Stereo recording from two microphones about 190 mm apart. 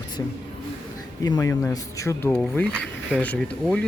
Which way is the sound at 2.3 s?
5° left (ahead or behind).